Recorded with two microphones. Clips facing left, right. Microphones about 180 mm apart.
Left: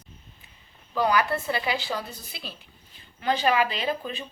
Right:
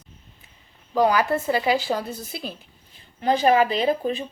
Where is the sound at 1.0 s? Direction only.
35° right (ahead or behind).